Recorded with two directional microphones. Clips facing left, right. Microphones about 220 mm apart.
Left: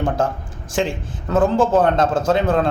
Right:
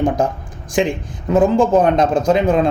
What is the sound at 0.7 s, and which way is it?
A man's voice, 15° right (ahead or behind).